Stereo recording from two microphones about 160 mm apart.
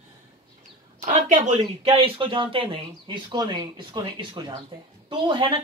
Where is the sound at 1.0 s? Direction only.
50° right (ahead or behind).